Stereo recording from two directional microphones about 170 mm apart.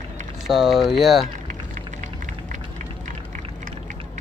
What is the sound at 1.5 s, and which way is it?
Typing, 50° right (ahead or behind).